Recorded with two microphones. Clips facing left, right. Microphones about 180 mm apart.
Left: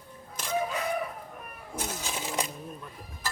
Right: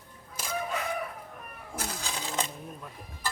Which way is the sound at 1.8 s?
20° left (ahead or behind).